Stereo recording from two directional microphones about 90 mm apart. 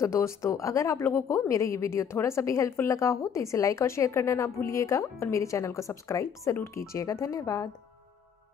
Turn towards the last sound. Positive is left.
turn(degrees=35)  # may be behind; listen again after turning